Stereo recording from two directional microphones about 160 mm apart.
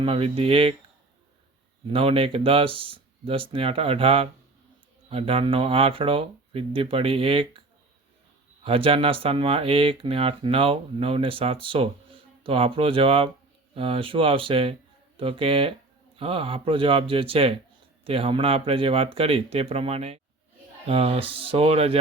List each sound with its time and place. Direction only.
0.0 s speech: 35° right (ahead or behind)
1.9 s speech: 35° right (ahead or behind)
8.6 s speech: 35° right (ahead or behind)